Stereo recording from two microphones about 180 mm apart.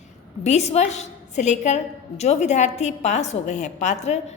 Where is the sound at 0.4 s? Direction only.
40° left (ahead or behind).